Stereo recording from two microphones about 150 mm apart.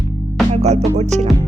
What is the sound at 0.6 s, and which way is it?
Music, 45° right (ahead or behind).